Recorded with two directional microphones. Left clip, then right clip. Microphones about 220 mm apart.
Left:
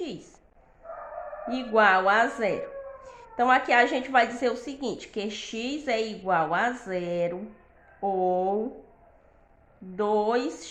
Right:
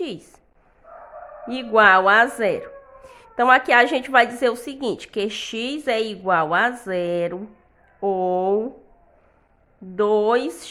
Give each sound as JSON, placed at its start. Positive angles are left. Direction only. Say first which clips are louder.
{"t": 1.5, "sound": "speech", "louder": "right 6 dB", "side_deg": -45}
{"t": 9.9, "sound": "speech", "louder": "right 6 dB", "side_deg": -45}